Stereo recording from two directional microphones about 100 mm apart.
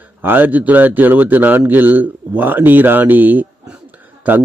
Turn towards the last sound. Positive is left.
turn(degrees=-15)  # may be behind; listen again after turning